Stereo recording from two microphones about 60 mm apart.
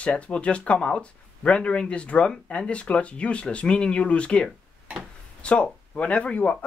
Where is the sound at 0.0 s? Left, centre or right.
Centre.